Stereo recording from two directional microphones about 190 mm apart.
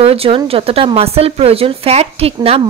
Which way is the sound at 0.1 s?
30° right (ahead or behind).